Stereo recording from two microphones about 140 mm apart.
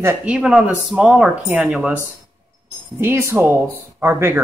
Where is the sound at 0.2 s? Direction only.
5° right (ahead or behind).